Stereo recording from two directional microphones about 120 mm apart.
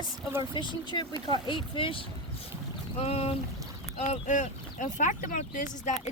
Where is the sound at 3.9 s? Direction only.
75° left (ahead or behind).